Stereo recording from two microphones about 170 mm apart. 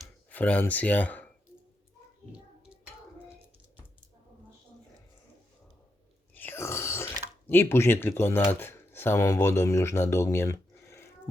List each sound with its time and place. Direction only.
0.0 s speech: 10° left (ahead or behind)
6.3 s burping: 10° left (ahead or behind)
8.6 s speech: 15° left (ahead or behind)